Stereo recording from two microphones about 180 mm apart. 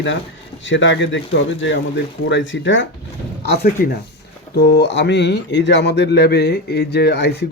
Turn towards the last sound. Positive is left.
turn(degrees=65)  # may be behind; listen again after turning